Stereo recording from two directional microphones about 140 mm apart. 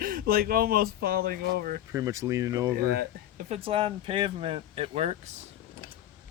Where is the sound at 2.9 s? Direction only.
90° right.